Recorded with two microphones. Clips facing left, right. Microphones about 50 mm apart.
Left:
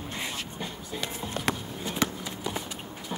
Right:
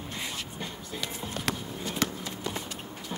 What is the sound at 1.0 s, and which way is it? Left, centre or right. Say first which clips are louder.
Music: left 3 dB; left.